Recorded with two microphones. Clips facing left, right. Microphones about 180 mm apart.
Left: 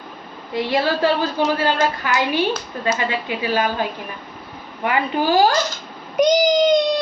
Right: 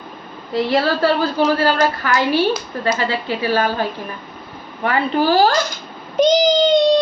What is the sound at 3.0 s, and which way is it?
Speech, 35° right (ahead or behind).